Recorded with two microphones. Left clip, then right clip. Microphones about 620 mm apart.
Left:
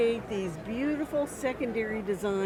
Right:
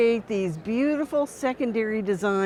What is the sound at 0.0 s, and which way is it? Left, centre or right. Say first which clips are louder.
Speech: right 6 dB; right.